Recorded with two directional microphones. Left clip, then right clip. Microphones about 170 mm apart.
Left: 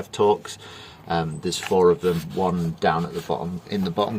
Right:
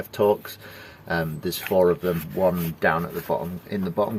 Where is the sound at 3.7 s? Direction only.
25° left (ahead or behind).